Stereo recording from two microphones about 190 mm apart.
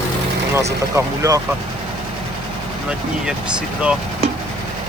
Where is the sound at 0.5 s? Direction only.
15° right (ahead or behind).